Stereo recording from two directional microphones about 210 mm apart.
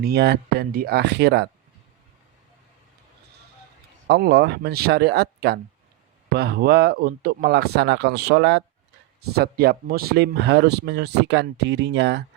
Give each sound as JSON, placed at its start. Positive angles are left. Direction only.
{"t": 0.0, "sound": "speech", "side_deg": -50}
{"t": 4.0, "sound": "speech", "side_deg": -50}